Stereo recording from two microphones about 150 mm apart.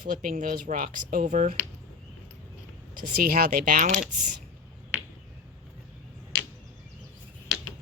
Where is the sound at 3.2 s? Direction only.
75° right (ahead or behind); by 4.3 s 55° right (ahead or behind).